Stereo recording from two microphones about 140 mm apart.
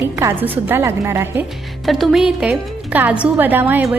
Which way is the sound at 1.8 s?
Centre (ahead or behind).